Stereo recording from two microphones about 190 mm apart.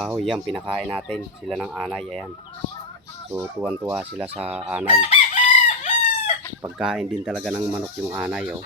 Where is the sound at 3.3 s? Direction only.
10° right (ahead or behind).